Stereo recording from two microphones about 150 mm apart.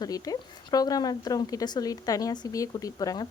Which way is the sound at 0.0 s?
25° left (ahead or behind).